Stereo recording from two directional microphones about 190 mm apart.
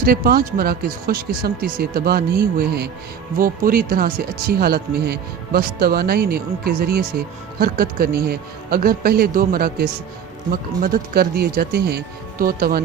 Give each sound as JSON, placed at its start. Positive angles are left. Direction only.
{"t": 0.0, "sound": "speech", "side_deg": -50}